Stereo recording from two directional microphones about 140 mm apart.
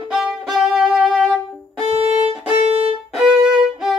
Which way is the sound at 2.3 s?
45° right (ahead or behind).